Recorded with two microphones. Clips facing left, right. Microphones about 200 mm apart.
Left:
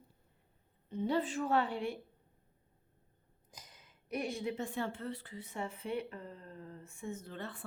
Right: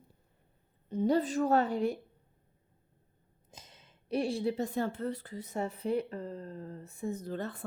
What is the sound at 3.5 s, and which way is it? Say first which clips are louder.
A woman's voice: right 3 dB; 25° right (ahead or behind).